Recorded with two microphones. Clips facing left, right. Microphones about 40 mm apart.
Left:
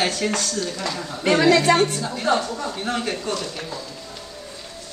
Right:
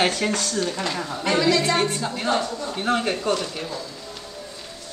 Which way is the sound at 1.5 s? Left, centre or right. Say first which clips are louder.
Left 5 dB; left.